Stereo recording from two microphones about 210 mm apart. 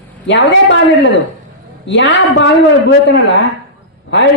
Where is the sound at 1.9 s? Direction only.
55° left (ahead or behind).